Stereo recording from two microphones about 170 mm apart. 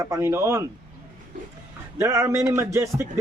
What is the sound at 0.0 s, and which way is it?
Speech, 15° right (ahead or behind).